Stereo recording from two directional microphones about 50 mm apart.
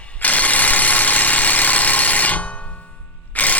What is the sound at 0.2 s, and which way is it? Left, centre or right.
Engine, left.